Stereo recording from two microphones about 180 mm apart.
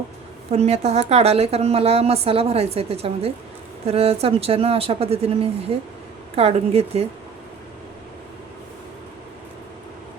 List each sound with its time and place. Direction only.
0.5 s a woman's voice: 35° right (ahead or behind)